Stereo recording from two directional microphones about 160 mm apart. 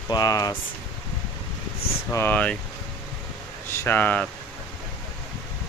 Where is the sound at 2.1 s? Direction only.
10° left (ahead or behind).